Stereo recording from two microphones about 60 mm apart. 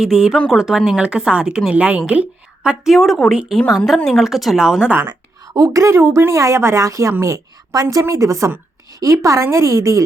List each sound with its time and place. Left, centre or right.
0.0 s speech: centre
1.0 s speech: centre
1.7 s speech: right
2.8 s a woman's voice: centre
5.0 s a sound: right
6.0 s a woman's voice: right
8.0 s a woman's voice: right